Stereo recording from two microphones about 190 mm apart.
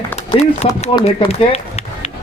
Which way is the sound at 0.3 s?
35° left (ahead or behind).